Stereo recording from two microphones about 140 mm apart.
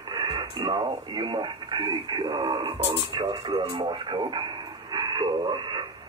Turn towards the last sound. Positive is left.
turn(degrees=-35)  # may be behind; listen again after turning